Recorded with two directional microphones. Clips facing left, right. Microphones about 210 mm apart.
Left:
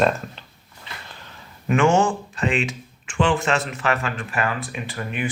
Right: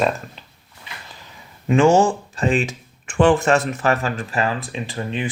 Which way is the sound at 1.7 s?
35° right (ahead or behind).